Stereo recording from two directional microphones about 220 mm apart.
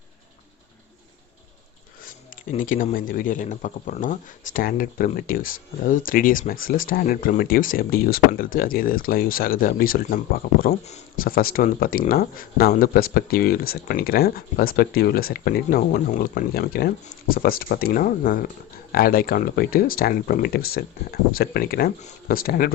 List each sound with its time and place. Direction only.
2.0 s speech: 35° left (ahead or behind)